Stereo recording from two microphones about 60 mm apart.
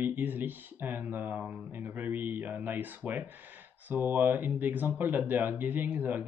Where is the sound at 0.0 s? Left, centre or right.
Right.